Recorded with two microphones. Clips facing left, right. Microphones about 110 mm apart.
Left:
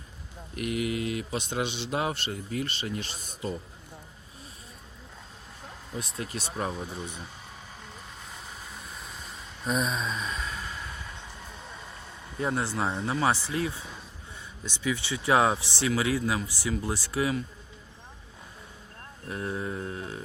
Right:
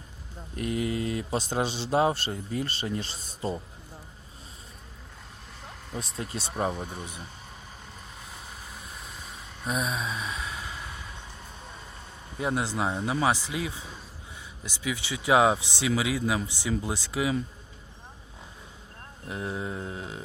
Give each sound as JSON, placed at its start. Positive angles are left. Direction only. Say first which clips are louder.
{"t": 0.5, "sound": "a man's voice", "louder": "right 1 dB", "side_deg": -30}
{"t": 6.3, "sound": "speech", "louder": "right 4 dB", "side_deg": -30}
{"t": 9.6, "sound": "a sound", "louder": "left 1 dB", "side_deg": -5}
{"t": 12.4, "sound": "speech", "louder": "right 1 dB", "side_deg": -15}
{"t": 19.3, "sound": "speech", "louder": "even", "side_deg": -15}